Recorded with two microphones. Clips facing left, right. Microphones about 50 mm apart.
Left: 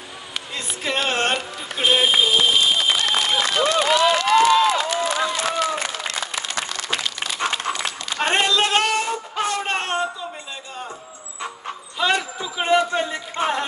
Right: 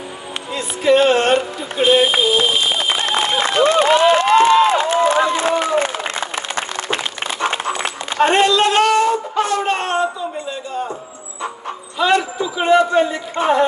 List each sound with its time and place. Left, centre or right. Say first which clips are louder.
0.6 s music: right 11 dB; centre
1.8 s speech: right 5 dB; centre
2.8 s run: right 1 dB; right
3.1 s applause: right 3 dB; right
7.4 s a sound: right 4 dB; right
8.2 s wail: right 6 dB; centre
12.0 s a sound: right 5 dB; centre
12.4 s speech: right 5 dB; centre